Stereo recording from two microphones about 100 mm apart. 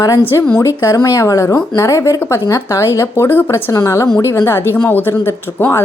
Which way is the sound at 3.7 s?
35° left (ahead or behind).